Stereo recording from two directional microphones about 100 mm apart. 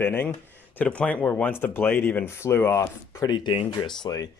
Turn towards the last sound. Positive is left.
turn(degrees=40)  # may be behind; listen again after turning